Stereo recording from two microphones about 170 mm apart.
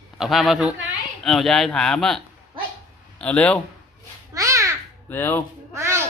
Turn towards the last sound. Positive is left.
turn(degrees=-15)  # may be behind; listen again after turning